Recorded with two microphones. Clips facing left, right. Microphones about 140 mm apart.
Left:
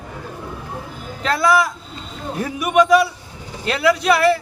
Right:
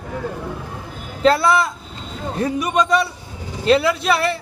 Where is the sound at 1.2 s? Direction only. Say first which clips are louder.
Right 7 dB; 30° right (ahead or behind).